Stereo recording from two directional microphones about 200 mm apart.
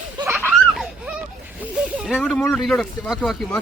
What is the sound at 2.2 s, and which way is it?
Speech, 5° left (ahead or behind).